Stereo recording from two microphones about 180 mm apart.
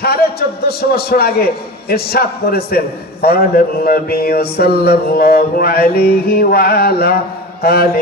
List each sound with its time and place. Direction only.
0.0 s a man's voice: 60° left (ahead or behind)